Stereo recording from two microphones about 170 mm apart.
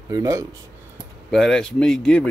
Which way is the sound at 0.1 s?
20° right (ahead or behind).